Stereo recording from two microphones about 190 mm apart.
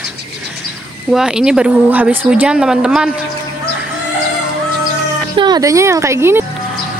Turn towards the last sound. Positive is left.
turn(degrees=-15)  # may be behind; listen again after turning